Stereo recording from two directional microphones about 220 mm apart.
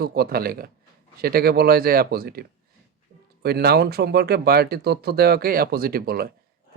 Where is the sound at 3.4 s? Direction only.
45° right (ahead or behind).